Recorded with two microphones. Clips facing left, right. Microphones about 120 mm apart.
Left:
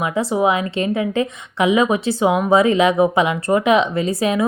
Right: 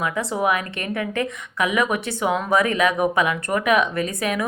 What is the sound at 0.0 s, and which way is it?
Speech, 25° left (ahead or behind).